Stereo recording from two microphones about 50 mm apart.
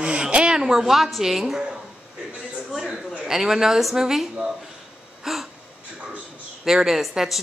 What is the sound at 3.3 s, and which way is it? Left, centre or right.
Speech, centre.